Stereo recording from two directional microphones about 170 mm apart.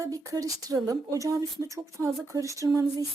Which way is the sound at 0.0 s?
20° right (ahead or behind).